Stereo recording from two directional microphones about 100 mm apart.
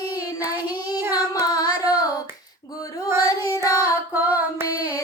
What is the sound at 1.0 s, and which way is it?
Singing, 20° right (ahead or behind).